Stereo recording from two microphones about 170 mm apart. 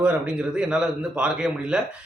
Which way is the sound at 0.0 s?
5° right (ahead or behind).